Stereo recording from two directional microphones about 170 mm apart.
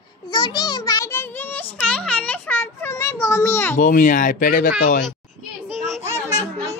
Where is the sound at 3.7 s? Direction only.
50° left (ahead or behind).